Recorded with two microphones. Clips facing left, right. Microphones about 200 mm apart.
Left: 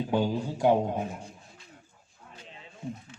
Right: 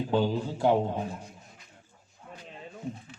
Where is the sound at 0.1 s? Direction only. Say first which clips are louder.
Right 1 dB; 15° left (ahead or behind).